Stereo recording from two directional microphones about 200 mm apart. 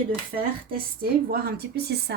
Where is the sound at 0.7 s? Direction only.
50° right (ahead or behind).